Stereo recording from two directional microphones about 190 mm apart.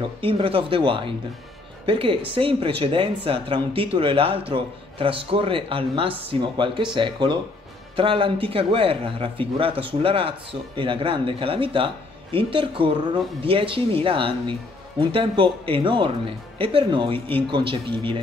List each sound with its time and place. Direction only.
0.2 s speech: 30° right (ahead or behind)